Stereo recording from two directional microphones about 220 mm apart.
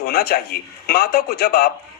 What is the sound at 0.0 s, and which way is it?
A man's voice, 45° left (ahead or behind).